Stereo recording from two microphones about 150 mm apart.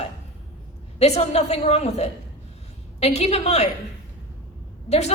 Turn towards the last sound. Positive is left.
turn(degrees=45)  # may be behind; listen again after turning